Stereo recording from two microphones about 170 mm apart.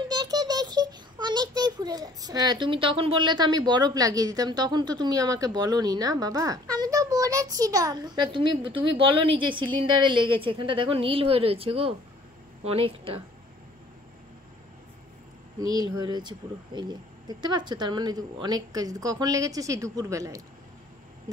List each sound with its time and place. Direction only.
0.1 s a child's voice: 20° right (ahead or behind)
15.6 s a woman's voice: 25° right (ahead or behind)